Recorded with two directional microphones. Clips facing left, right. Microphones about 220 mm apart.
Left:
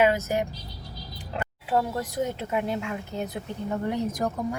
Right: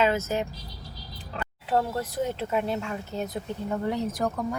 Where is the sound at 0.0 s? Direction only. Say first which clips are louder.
Left 2 dB; 15° left (ahead or behind).